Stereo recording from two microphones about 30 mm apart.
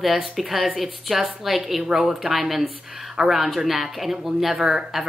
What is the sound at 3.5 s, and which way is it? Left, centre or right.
Speech, centre.